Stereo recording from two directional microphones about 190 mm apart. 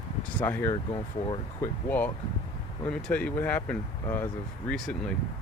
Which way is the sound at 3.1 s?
10° left (ahead or behind).